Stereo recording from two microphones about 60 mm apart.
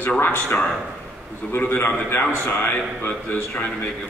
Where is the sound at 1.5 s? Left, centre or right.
Left.